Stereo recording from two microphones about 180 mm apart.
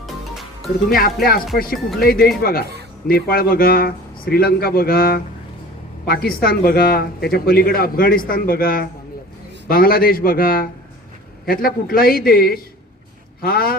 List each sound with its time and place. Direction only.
0.0 s music: centre (ahead or behind)
0.9 s speech: 55° left (ahead or behind)